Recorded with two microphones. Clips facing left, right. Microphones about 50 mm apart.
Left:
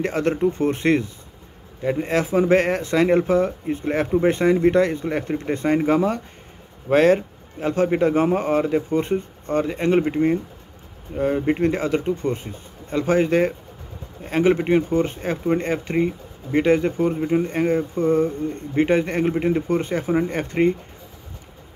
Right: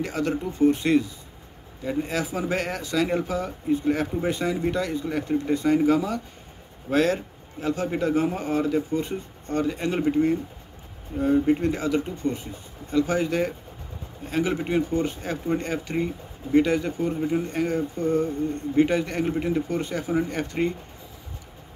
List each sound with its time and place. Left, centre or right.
0.0 s speech: left